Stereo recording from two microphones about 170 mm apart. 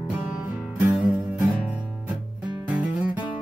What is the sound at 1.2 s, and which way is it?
Guitar, 5° right (ahead or behind).